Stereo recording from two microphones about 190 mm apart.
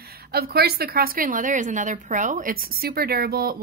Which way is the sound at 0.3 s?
55° right (ahead or behind).